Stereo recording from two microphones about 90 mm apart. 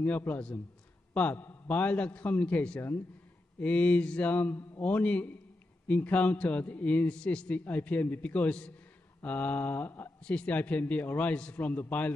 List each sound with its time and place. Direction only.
0.0 s mantra: 20° left (ahead or behind)
1.1 s a man's voice: 20° left (ahead or behind)
9.2 s mantra: 15° left (ahead or behind)
10.2 s a man's voice: 10° left (ahead or behind)